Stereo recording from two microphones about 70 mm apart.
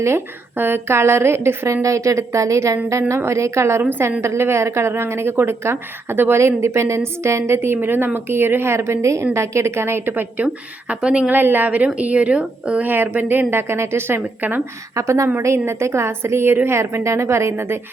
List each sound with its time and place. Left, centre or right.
0.0 s a woman's voice: right; by 11.3 s centre
11.3 s speech: right
12.9 s a woman's voice: right
14.4 s speech: right
14.9 s a woman's voice: right